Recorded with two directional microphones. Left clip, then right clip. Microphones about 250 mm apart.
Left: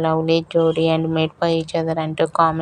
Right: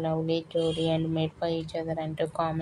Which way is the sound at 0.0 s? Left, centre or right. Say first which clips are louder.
Left 11 dB; left.